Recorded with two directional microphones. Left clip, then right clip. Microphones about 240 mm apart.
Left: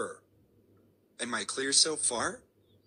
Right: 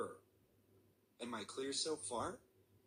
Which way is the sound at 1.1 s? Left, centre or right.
Centre.